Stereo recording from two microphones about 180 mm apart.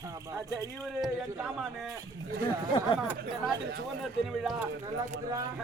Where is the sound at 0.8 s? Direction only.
Centre (ahead or behind).